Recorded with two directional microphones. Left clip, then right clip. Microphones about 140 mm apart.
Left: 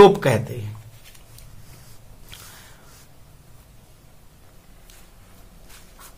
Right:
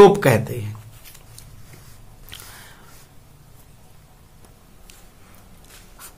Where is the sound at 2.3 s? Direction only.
25° right (ahead or behind).